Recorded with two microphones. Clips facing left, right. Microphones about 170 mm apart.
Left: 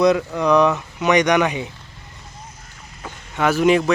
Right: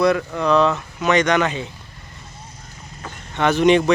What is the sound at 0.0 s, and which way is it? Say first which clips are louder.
Speech: left 2 dB; 20° left (ahead or behind).